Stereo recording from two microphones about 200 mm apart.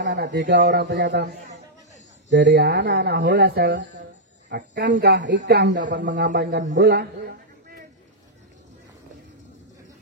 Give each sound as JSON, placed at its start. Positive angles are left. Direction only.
{"t": 0.0, "sound": "speech", "side_deg": -60}